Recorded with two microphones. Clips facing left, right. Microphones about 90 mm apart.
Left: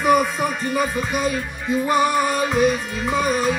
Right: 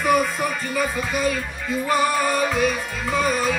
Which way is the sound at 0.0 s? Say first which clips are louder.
Left 2 dB; 15° left (ahead or behind).